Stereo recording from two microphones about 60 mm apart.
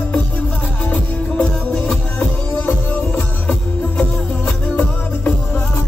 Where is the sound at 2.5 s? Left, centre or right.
Left.